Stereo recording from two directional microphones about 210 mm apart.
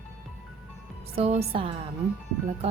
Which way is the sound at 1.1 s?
30° right (ahead or behind).